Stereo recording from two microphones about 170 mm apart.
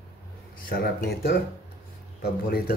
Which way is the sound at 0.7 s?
70° left (ahead or behind).